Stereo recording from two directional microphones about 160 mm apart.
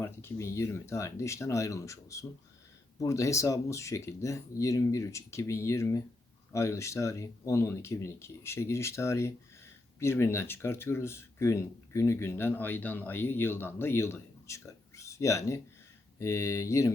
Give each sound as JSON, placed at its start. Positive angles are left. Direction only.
{"t": 0.0, "sound": "speech", "side_deg": 15}